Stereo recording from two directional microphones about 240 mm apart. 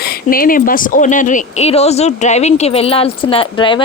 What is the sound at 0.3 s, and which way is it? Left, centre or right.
Speech, left.